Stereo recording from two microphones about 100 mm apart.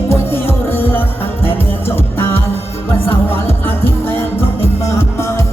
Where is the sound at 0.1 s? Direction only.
25° left (ahead or behind).